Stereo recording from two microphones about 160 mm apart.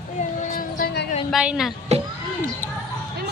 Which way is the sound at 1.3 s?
5° right (ahead or behind).